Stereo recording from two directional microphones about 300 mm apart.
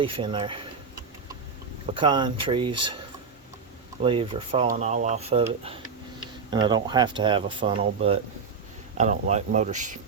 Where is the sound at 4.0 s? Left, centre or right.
Centre.